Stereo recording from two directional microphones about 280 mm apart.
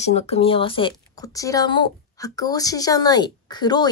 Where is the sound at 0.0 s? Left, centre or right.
Left.